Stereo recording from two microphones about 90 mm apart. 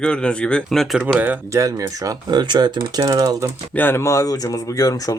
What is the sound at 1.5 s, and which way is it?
Speech, 35° right (ahead or behind).